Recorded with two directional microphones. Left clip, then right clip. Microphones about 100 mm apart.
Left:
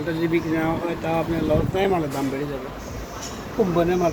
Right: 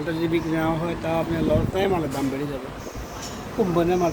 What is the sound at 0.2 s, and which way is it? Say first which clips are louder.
Speech: left 1 dB; 25° right (ahead or behind).